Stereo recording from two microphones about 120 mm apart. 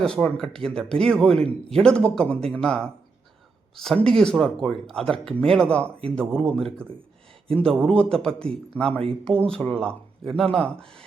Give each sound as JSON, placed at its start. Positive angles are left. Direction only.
{"t": 0.0, "sound": "a man's voice", "side_deg": 5}
{"t": 8.9, "sound": "speech", "side_deg": -55}
{"t": 9.2, "sound": "speech", "side_deg": 5}